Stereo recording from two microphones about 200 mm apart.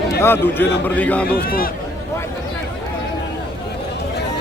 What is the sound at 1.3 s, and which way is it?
Speech, 45° left (ahead or behind).